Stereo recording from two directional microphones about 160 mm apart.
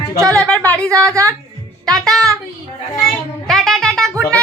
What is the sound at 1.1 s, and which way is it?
Speech, 20° right (ahead or behind).